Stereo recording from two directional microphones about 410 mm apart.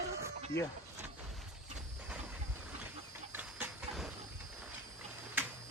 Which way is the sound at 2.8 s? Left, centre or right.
Centre.